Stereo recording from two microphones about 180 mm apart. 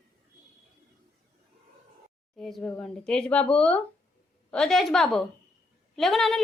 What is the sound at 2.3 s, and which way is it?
Speech, centre (ahead or behind).